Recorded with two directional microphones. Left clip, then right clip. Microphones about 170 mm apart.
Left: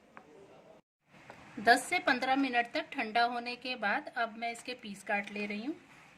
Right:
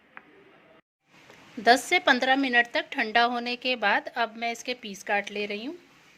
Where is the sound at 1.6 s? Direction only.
30° right (ahead or behind).